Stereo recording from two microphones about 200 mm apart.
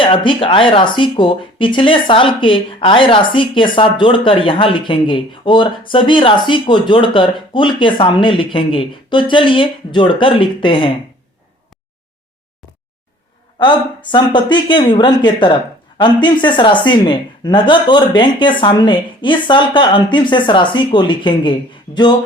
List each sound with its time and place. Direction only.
0.0 s speech: 25° left (ahead or behind)
13.6 s speech: 25° left (ahead or behind)